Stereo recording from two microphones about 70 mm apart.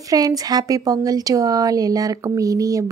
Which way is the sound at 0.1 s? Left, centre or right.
Right.